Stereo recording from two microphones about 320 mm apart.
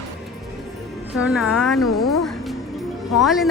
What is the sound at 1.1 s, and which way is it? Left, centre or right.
Speech, centre.